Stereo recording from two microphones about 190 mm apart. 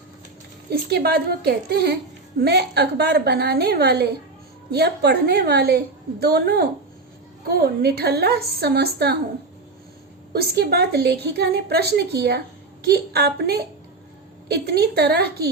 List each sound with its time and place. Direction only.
0.7 s a woman's voice: 55° right (ahead or behind)
10.3 s a woman's voice: 55° right (ahead or behind)